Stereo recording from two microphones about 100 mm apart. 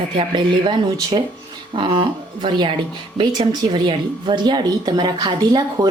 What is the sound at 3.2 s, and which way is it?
Speech, 45° right (ahead or behind).